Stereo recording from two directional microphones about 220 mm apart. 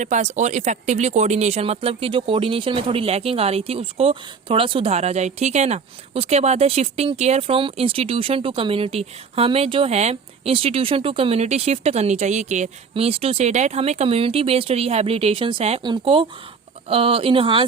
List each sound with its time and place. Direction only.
0.0 s speech: 30° right (ahead or behind)